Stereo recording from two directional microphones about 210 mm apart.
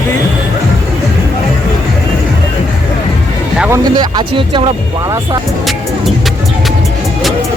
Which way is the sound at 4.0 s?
20° right (ahead or behind).